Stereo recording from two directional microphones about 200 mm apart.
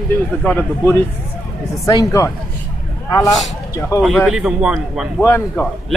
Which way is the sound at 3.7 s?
15° left (ahead or behind).